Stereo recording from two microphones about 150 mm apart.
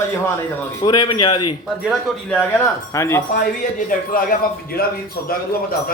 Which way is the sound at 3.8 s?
70° left (ahead or behind).